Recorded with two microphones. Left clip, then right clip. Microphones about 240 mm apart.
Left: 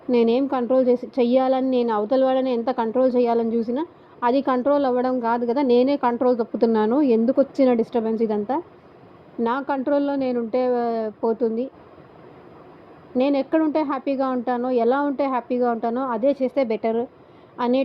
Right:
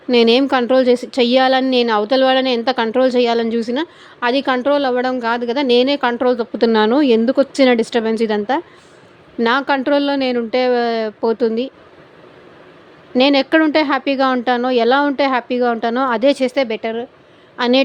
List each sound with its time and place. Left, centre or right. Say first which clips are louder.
0.1 s a woman's voice: right 7 dB; right
13.1 s a woman's voice: right 7 dB; right
16.6 s speech: right 1 dB; centre
17.6 s a woman's voice: right 7 dB; right